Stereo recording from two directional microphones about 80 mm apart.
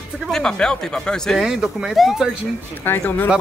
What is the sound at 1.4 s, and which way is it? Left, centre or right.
Speech, centre.